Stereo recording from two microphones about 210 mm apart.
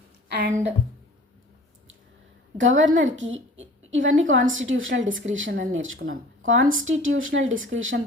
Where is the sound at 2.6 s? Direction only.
65° right (ahead or behind).